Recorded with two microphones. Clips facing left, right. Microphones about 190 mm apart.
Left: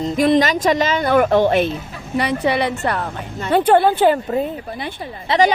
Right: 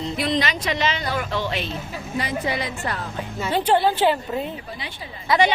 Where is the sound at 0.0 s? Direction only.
45° left (ahead or behind).